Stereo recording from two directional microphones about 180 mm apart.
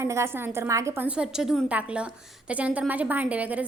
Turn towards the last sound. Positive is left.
turn(degrees=-10)  # may be behind; listen again after turning